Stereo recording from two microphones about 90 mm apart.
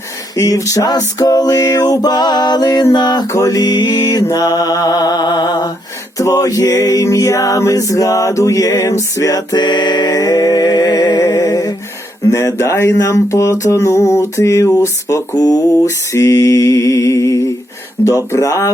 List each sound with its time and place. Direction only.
0.3 s music: 40° left (ahead or behind); by 3.2 s 55° left (ahead or behind)
3.3 s music: 40° left (ahead or behind)
6.1 s music: 40° left (ahead or behind)
12.3 s a sound: 40° left (ahead or behind)